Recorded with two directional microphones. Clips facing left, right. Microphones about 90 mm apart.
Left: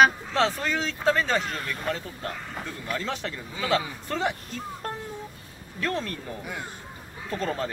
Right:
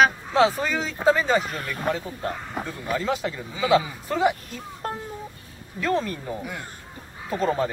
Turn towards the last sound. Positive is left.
turn(degrees=-10)  # may be behind; listen again after turning